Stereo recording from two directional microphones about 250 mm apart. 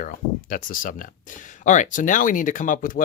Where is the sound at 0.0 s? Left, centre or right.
Left.